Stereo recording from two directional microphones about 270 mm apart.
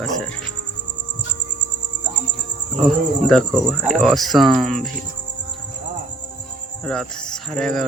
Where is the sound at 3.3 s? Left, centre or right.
Centre.